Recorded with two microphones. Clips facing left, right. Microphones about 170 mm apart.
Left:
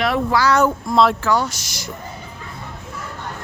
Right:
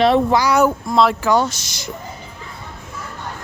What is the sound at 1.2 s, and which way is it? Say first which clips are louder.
Speech: right 3 dB; 20° right (ahead or behind).